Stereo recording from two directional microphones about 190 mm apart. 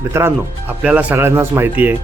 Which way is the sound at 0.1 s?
15° right (ahead or behind).